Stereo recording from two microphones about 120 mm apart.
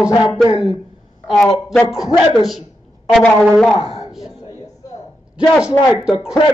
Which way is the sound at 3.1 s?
5° left (ahead or behind).